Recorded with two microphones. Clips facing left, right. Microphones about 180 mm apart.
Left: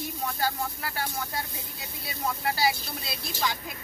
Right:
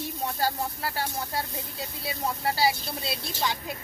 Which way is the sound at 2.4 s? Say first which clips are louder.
Right 2 dB; 30° right (ahead or behind).